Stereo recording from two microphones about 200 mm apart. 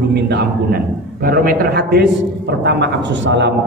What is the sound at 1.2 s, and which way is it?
A man's voice, 45° right (ahead or behind).